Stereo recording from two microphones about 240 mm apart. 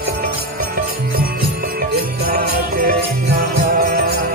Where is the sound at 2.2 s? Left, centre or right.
Right.